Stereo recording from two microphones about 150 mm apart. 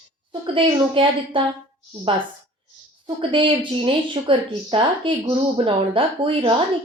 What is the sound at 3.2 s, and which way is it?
Speech, 35° right (ahead or behind).